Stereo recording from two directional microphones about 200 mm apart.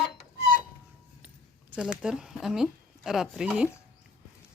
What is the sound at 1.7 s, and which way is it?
Speech, 5° right (ahead or behind).